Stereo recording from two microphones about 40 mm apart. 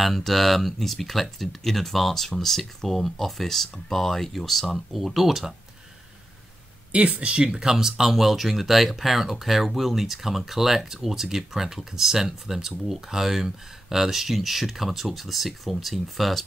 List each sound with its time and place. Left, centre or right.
0.0 s speech: centre
6.9 s speech: right
7.7 s speech: centre